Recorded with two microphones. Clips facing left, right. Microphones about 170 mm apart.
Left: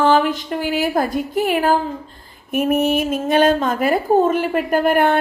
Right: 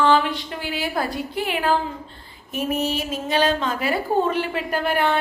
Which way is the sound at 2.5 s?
55° left (ahead or behind).